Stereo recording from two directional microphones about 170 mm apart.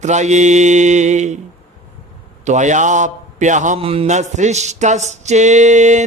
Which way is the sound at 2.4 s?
45° right (ahead or behind).